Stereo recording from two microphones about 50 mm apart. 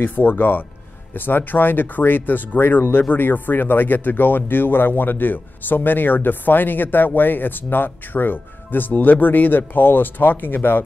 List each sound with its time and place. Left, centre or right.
0.0 s speech: left